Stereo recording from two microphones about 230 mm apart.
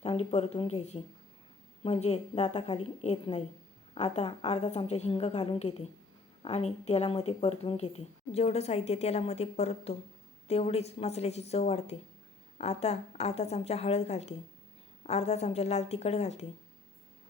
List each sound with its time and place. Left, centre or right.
0.0 s speech: left